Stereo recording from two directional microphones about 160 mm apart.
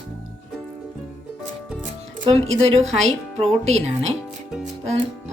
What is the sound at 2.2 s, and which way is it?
Speech, 40° right (ahead or behind).